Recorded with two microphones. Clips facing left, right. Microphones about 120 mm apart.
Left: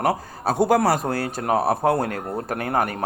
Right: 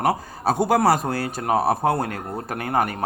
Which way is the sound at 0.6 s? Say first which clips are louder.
Even; 20° right (ahead or behind).